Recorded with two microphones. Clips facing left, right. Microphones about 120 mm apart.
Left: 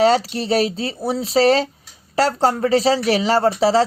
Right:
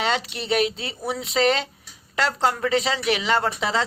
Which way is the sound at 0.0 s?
35° left (ahead or behind).